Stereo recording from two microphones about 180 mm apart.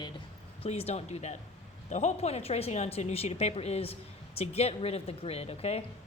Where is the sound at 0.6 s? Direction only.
35° left (ahead or behind).